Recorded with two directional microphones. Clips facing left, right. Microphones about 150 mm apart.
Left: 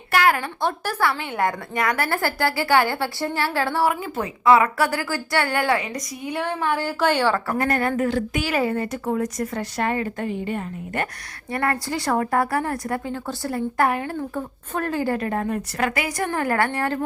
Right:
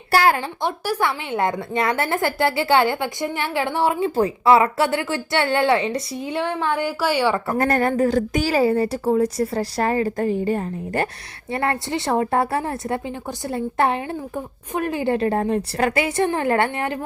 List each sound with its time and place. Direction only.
0.1 s speech: 30° right (ahead or behind)
0.6 s a woman's voice: 15° right (ahead or behind)
7.6 s a woman's voice: 40° right (ahead or behind); by 17.0 s 20° right (ahead or behind)